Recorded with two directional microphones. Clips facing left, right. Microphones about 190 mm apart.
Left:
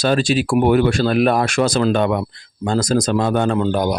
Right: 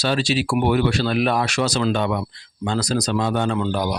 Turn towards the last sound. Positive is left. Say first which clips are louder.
# left 4 dB
turn(degrees=50)  # may be behind; listen again after turning